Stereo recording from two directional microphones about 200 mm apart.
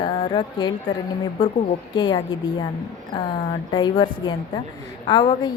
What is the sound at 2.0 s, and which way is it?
Speech, 20° left (ahead or behind).